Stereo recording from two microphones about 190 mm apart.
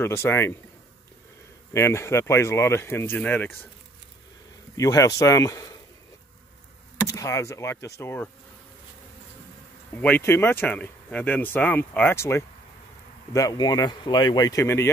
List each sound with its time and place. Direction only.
0.0 s speech: 10° left (ahead or behind)
1.7 s speech: 15° left (ahead or behind)
4.7 s speech: 15° left (ahead or behind)
7.1 s speech: 15° left (ahead or behind)
10.0 s speech: 10° left (ahead or behind)